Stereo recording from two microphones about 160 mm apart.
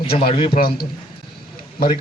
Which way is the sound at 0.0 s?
35° left (ahead or behind).